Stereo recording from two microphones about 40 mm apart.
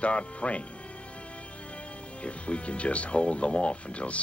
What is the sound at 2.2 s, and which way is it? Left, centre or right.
Speech, left.